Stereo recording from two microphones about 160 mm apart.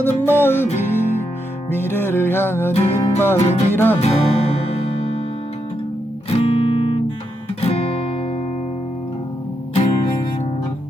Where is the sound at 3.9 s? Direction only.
40° left (ahead or behind).